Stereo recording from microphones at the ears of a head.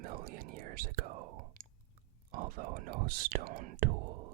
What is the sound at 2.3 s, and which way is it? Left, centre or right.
Speech, right.